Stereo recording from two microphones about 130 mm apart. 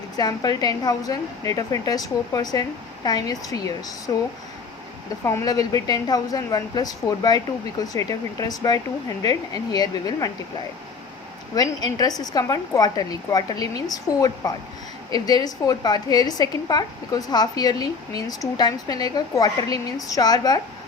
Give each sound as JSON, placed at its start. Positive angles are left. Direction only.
{"t": 0.2, "sound": "a woman's voice", "side_deg": 30}
{"t": 5.2, "sound": "a woman's voice", "side_deg": 25}
{"t": 11.5, "sound": "a woman's voice", "side_deg": 30}